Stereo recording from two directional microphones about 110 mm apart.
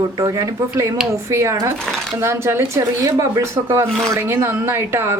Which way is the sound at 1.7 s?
5° left (ahead or behind).